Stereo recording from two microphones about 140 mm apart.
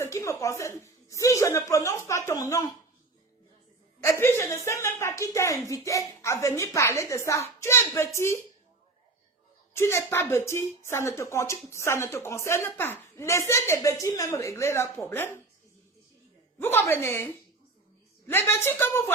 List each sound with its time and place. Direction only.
0.0 s a woman's voice: 20° left (ahead or behind)
4.0 s a woman's voice: 20° left (ahead or behind)
9.7 s a woman's voice: 20° left (ahead or behind)
16.6 s speech: 15° left (ahead or behind)